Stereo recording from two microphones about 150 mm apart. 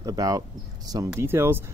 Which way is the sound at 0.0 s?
25° right (ahead or behind).